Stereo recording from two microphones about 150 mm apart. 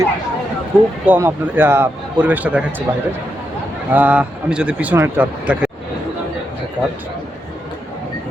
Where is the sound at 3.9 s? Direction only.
10° right (ahead or behind).